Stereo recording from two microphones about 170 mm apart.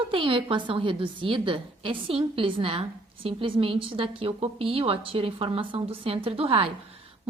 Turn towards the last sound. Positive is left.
turn(degrees=-35)  # may be behind; listen again after turning